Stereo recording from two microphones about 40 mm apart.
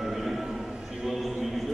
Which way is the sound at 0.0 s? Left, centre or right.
Centre.